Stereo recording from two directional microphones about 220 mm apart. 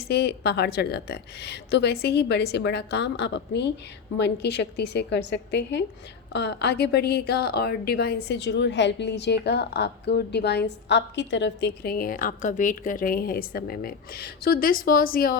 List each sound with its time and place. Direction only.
0.1 s a woman's voice: 50° left (ahead or behind)